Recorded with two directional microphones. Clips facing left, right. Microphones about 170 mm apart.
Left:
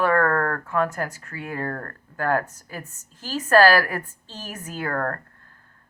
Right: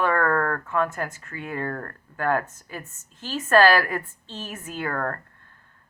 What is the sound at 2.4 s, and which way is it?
Speech, 40° left (ahead or behind).